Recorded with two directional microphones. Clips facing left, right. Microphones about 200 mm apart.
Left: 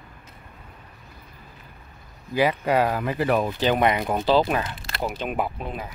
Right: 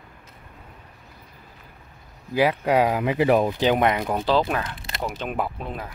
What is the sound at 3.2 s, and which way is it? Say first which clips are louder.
Speech: right 3 dB; 20° right (ahead or behind).